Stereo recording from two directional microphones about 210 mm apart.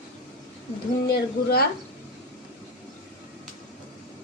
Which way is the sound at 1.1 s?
45° left (ahead or behind).